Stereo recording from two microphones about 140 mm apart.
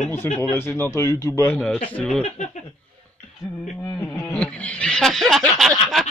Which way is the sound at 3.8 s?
10° left (ahead or behind).